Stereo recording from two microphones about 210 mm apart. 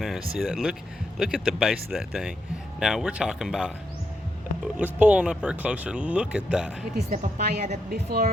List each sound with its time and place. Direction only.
0.0 s speech: centre (ahead or behind)
7.1 s a woman's voice: 50° right (ahead or behind)